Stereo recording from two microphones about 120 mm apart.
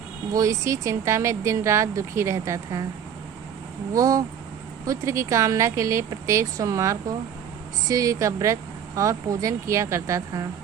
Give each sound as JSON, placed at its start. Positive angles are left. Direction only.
{"t": 0.3, "sound": "speech", "side_deg": -25}
{"t": 3.9, "sound": "speech", "side_deg": -30}